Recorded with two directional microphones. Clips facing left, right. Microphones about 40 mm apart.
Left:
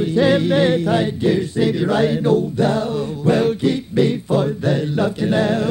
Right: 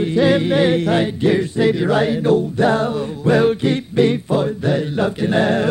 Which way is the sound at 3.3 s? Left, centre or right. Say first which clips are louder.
Right 3 dB; right.